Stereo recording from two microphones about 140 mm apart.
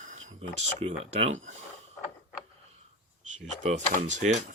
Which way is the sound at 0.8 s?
45° right (ahead or behind).